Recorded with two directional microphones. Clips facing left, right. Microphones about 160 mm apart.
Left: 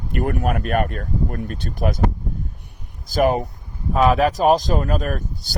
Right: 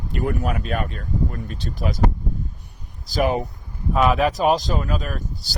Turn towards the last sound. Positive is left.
turn(degrees=50)  # may be behind; listen again after turning